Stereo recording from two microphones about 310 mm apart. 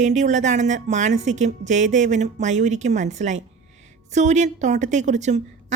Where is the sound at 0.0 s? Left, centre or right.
Right.